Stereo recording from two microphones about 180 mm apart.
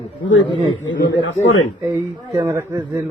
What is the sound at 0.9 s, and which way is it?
Speech, 90° left.